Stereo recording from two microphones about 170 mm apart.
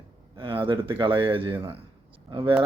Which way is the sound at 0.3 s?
30° right (ahead or behind).